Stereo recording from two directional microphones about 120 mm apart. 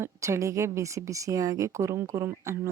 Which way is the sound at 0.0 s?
25° right (ahead or behind).